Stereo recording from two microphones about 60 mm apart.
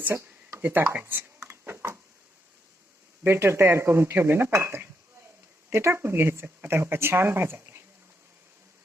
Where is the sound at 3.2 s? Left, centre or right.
Right.